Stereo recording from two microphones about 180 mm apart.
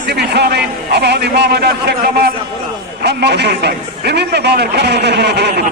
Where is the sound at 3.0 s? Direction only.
65° right (ahead or behind).